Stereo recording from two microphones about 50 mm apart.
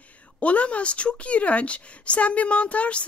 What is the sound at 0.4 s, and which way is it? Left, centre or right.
A woman's voice, left.